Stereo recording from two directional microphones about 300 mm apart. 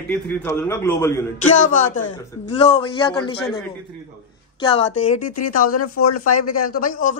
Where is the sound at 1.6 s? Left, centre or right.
Left.